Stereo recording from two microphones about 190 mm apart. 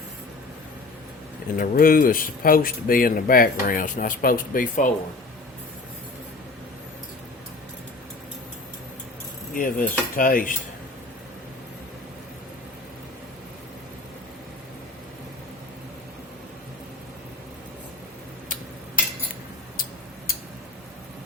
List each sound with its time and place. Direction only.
1.5 s speech: 50° left (ahead or behind)
9.6 s speech: 45° left (ahead or behind)